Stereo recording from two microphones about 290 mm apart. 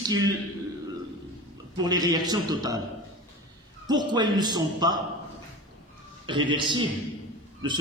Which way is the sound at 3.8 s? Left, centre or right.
Centre.